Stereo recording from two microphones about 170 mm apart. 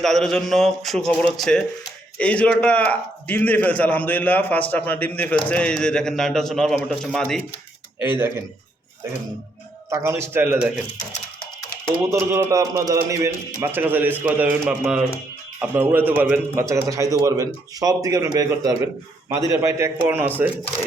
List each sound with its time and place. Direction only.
0.0 s a man's voice: 5° left (ahead or behind)
7.9 s a man's voice: 10° right (ahead or behind)
9.9 s a man's voice: 15° right (ahead or behind)
12.0 s a man's voice: 15° right (ahead or behind)